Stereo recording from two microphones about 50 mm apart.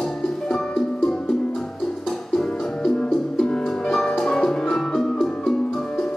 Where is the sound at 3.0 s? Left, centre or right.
Centre.